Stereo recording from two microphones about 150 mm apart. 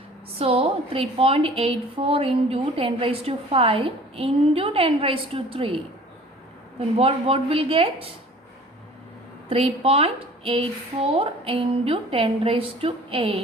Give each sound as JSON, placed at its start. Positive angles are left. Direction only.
{"t": 0.3, "sound": "a woman's voice", "side_deg": -40}
{"t": 9.5, "sound": "a woman's voice", "side_deg": -40}